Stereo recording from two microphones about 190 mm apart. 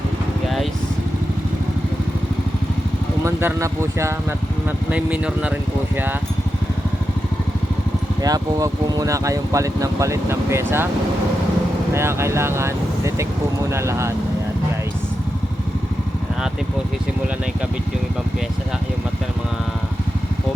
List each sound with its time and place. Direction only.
0.4 s vehicle: centre (ahead or behind)
3.2 s speech: 15° right (ahead or behind)
8.2 s speech: 20° right (ahead or behind)
11.9 s speech: 15° right (ahead or behind)